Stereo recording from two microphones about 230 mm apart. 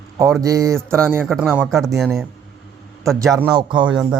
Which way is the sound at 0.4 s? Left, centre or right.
Centre.